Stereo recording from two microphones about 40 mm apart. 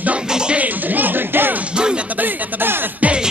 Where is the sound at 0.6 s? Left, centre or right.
Right.